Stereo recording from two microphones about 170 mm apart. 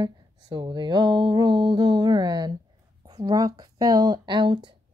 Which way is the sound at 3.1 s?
20° right (ahead or behind).